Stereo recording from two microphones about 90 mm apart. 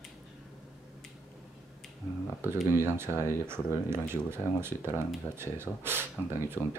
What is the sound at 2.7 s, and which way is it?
Speech, 25° right (ahead or behind).